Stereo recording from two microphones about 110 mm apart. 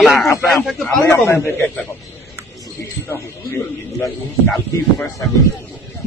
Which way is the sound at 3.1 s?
25° left (ahead or behind).